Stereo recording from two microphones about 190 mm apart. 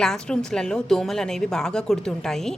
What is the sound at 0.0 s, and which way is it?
A woman's voice, 5° left (ahead or behind).